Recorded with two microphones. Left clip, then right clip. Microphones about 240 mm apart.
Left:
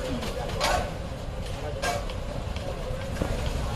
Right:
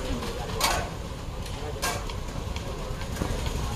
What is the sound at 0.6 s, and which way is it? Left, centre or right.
Mechanisms, right.